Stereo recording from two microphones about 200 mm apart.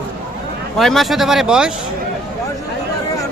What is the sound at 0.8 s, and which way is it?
Speech, centre (ahead or behind).